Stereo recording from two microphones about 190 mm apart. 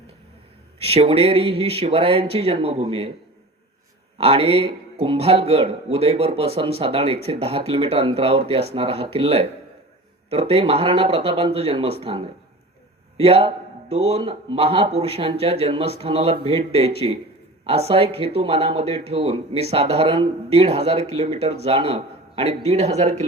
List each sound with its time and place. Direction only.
0.9 s speech: 30° right (ahead or behind)
4.2 s speech: 30° right (ahead or behind)